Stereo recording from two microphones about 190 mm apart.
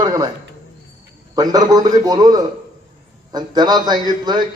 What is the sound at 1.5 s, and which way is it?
A man's voice, 20° right (ahead or behind).